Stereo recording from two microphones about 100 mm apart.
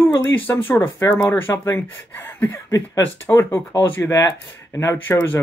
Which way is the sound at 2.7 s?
35° left (ahead or behind).